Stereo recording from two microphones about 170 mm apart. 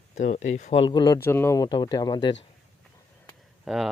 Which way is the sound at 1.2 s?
15° left (ahead or behind).